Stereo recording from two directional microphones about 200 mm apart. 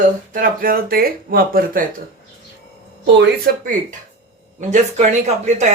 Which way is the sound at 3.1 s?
60° right (ahead or behind).